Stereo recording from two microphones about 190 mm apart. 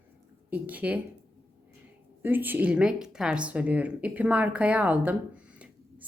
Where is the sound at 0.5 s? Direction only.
10° right (ahead or behind).